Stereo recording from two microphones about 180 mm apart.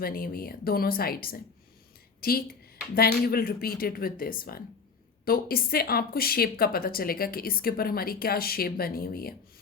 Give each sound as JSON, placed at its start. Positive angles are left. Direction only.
{"t": 0.0, "sound": "speech", "side_deg": 55}
{"t": 2.9, "sound": "speech", "side_deg": 60}